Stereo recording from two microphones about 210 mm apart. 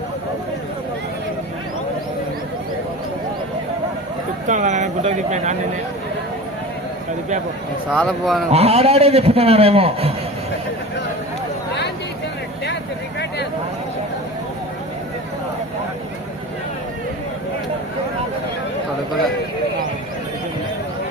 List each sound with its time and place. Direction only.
4.4 s speech: 35° right (ahead or behind)
7.9 s a man's voice: centre (ahead or behind)
8.4 s a man's voice: 30° right (ahead or behind)